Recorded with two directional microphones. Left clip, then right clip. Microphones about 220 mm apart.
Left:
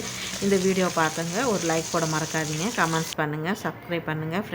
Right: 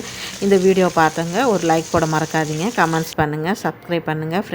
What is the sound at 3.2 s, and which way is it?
A woman's voice, 20° right (ahead or behind).